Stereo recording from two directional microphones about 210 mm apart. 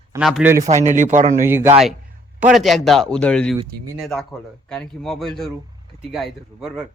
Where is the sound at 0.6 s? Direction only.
35° right (ahead or behind).